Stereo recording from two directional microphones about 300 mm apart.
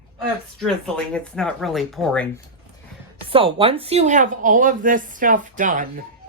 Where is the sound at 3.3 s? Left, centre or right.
Centre.